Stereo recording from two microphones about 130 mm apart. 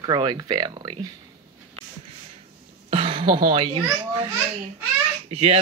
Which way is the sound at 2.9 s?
45° right (ahead or behind).